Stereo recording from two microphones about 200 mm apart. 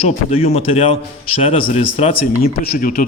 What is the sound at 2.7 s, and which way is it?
Speech, 45° left (ahead or behind).